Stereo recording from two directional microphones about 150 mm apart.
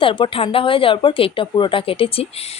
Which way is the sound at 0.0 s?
35° left (ahead or behind).